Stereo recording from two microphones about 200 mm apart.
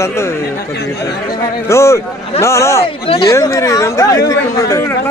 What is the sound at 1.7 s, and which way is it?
Speech, 15° left (ahead or behind).